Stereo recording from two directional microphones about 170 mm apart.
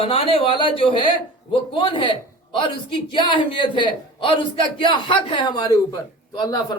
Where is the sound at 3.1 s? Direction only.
30° left (ahead or behind).